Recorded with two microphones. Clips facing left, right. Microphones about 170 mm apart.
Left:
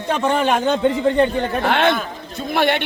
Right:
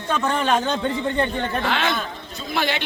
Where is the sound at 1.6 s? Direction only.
55° left (ahead or behind).